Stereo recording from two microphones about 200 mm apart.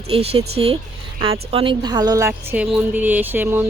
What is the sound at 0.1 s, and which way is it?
A woman's voice, 30° right (ahead or behind).